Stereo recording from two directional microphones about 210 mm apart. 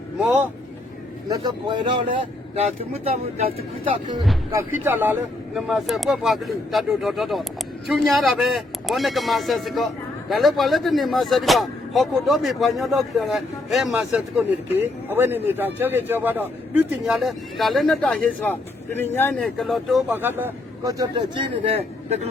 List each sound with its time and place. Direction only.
0.2 s speech: 5° right (ahead or behind)
1.3 s speech: 20° right (ahead or behind)
4.8 s speech: 10° right (ahead or behind); by 22.3 s 30° right (ahead or behind)